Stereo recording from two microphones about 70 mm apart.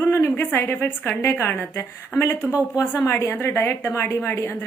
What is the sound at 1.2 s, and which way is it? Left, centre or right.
A woman's voice, left.